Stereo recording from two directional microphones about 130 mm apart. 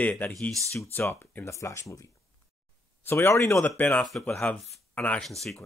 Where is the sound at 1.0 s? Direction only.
15° left (ahead or behind); by 5.6 s centre (ahead or behind).